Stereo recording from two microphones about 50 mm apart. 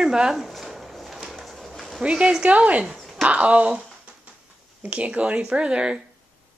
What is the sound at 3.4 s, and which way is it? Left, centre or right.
Speech, right.